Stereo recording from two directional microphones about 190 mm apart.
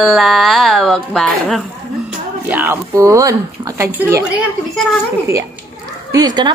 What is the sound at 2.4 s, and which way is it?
Speech, 10° right (ahead or behind).